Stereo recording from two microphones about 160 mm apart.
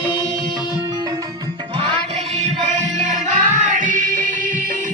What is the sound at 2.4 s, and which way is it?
Music, 50° right (ahead or behind).